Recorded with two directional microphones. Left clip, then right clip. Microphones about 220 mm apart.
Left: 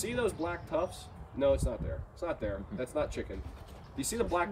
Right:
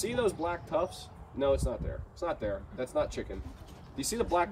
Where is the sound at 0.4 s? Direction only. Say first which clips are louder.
Right 2 dB; 5° right (ahead or behind).